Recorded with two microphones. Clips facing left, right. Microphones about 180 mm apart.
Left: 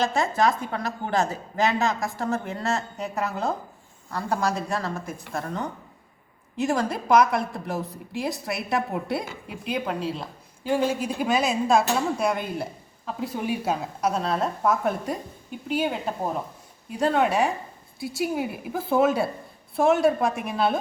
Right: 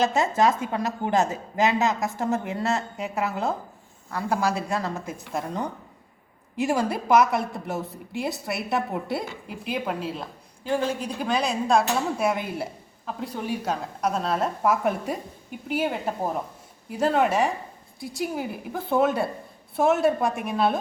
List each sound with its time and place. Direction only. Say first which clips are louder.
0.1 s a woman's voice: right 1 dB; 20° right (ahead or behind)
13.1 s a woman's voice: left 2 dB; 5° left (ahead or behind)